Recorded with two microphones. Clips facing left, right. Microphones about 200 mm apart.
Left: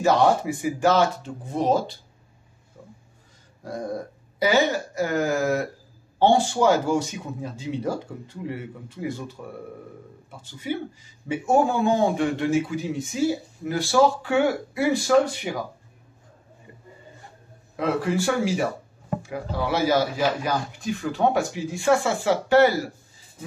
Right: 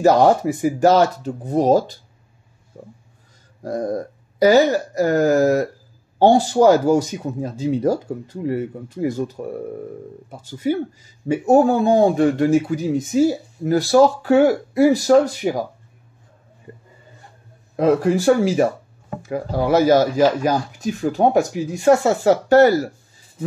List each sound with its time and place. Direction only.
0.0 s speech: 40° right (ahead or behind)
2.8 s pig: 50° right (ahead or behind)
4.4 s speech: 40° right (ahead or behind)
10.4 s speech: 40° right (ahead or behind)
16.7 s a sound: 45° right (ahead or behind)
17.7 s speech: 40° right (ahead or behind)